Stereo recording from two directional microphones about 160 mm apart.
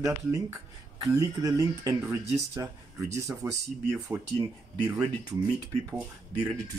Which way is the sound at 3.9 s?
Centre (ahead or behind).